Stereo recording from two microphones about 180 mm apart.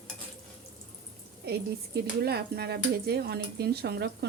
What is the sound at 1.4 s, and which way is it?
A woman's voice, 65° right (ahead or behind).